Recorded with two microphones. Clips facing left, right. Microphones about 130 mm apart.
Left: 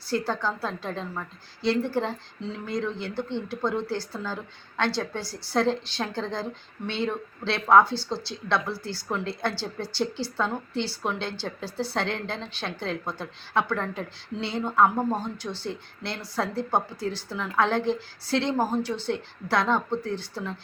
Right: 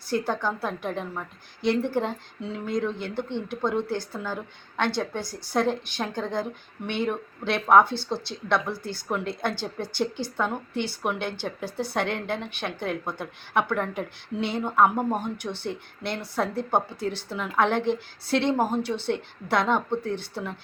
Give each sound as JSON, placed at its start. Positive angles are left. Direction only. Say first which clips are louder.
{"t": 0.1, "sound": "a woman's voice", "louder": "right 1 dB", "side_deg": -15}
{"t": 15.5, "sound": "speech", "louder": "right 1 dB", "side_deg": -60}
{"t": 16.3, "sound": "a woman's voice", "louder": "right 1 dB", "side_deg": -20}